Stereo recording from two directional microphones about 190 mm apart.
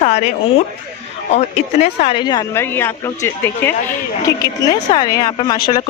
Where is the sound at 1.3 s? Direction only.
35° left (ahead or behind); by 5.6 s 20° left (ahead or behind).